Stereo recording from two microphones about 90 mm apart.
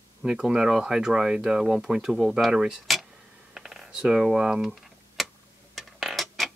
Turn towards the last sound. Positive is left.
turn(degrees=0)  # may be behind; listen again after turning